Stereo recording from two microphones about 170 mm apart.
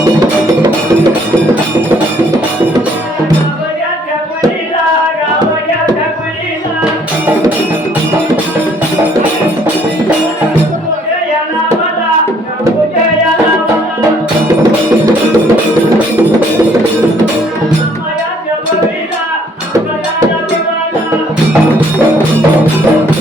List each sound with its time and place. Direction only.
14.4 s music: 20° right (ahead or behind)